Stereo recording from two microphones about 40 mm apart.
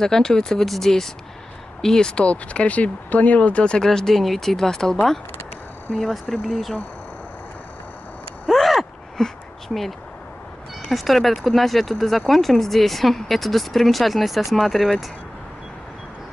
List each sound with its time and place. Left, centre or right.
0.0 s speech: centre
2.2 s speech: left
3.7 s speech: centre
5.9 s speech: centre
8.5 s gasp: centre
10.9 s speech: centre